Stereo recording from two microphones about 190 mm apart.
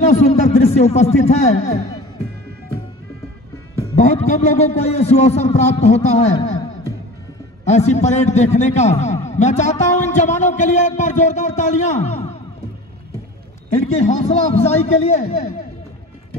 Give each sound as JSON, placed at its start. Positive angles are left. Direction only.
{"t": 0.0, "sound": "a man's voice", "side_deg": 35}
{"t": 3.9, "sound": "a man's voice", "side_deg": 35}
{"t": 7.6, "sound": "a man's voice", "side_deg": 35}
{"t": 13.7, "sound": "a man's voice", "side_deg": 40}